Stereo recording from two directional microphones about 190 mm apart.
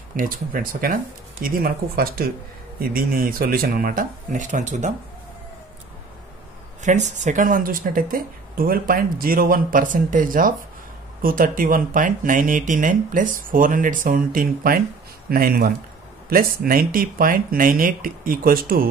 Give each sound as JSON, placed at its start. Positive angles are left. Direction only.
{"t": 0.1, "sound": "speech", "side_deg": -45}
{"t": 6.8, "sound": "speech", "side_deg": -40}